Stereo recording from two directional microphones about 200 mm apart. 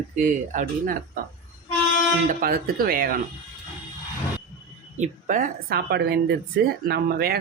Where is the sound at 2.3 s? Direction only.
45° right (ahead or behind).